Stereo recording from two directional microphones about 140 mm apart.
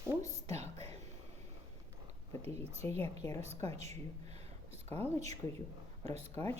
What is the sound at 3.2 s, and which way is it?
Speech, 25° left (ahead or behind).